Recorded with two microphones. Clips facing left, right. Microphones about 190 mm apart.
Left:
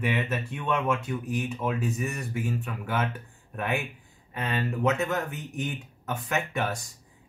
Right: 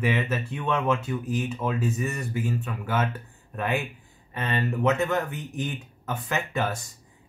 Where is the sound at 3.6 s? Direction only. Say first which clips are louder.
Right 2 dB; centre (ahead or behind).